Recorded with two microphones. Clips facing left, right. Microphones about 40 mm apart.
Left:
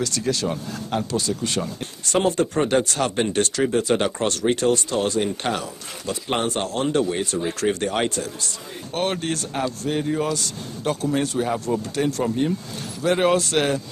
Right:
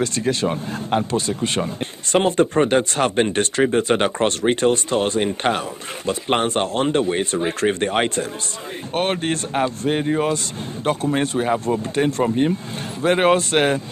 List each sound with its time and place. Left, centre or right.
0.0 s speech: right